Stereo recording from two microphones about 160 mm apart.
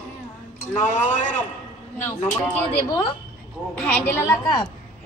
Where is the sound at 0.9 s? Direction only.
50° left (ahead or behind).